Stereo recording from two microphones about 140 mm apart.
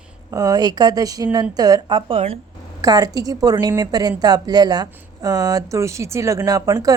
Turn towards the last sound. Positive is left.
turn(degrees=-25)  # may be behind; listen again after turning